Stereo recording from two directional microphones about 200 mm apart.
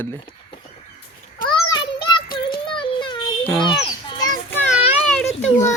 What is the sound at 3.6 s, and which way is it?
Children playing, 20° left (ahead or behind).